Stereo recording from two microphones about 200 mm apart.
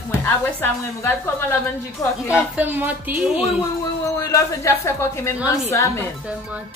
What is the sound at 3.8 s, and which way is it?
A woman's voice, 15° left (ahead or behind).